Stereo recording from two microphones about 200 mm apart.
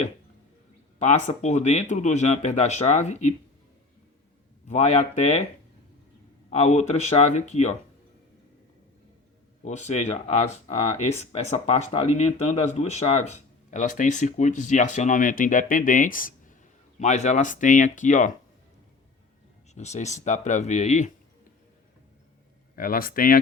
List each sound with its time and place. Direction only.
0.9 s speech: 35° left (ahead or behind)
4.7 s speech: 35° left (ahead or behind)
6.5 s speech: 35° left (ahead or behind)
9.6 s speech: 35° left (ahead or behind)
19.7 s speech: 35° left (ahead or behind)
22.7 s speech: 45° left (ahead or behind)